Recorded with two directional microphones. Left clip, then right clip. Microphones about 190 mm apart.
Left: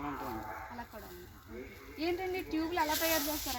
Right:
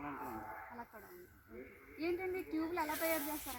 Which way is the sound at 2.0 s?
10° left (ahead or behind).